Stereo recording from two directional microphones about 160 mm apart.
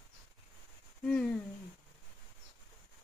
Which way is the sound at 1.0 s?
5° left (ahead or behind).